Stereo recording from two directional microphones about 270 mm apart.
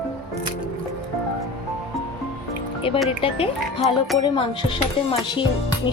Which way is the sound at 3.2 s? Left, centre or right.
Left.